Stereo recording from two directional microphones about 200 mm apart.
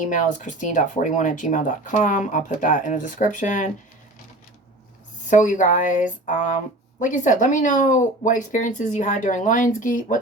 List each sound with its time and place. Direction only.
0.0 s speech: 40° left (ahead or behind)
5.3 s speech: 40° left (ahead or behind)